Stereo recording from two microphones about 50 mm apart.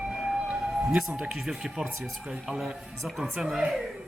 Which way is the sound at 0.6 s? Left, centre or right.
Centre.